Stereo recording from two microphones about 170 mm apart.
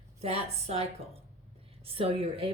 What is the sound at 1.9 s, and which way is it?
Speech, 35° right (ahead or behind).